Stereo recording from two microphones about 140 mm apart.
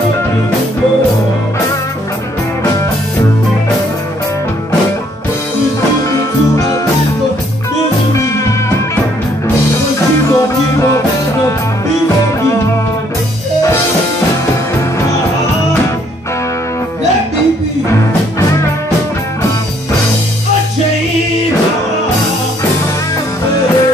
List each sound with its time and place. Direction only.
10.3 s music: 20° left (ahead or behind)